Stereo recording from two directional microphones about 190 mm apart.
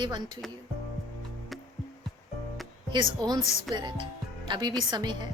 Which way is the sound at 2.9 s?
25° right (ahead or behind).